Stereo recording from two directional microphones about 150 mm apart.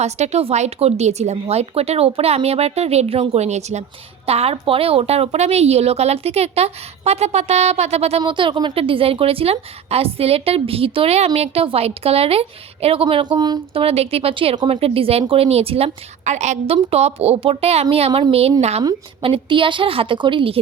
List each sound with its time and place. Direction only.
0.0 s a woman's voice: 45° right (ahead or behind)
8.2 s a woman's voice: 35° right (ahead or behind)
13.8 s a woman's voice: 40° right (ahead or behind)